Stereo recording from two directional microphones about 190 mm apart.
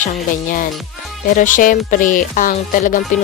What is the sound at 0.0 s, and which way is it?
Speech, 45° left (ahead or behind).